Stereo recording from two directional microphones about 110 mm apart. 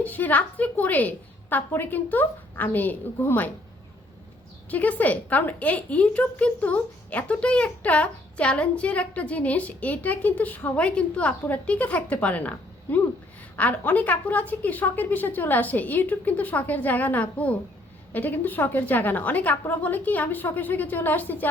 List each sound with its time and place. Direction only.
0.0 s a woman's voice: 15° left (ahead or behind)
4.7 s a woman's voice: 15° left (ahead or behind)